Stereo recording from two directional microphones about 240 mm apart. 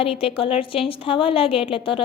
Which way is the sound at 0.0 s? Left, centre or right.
Left.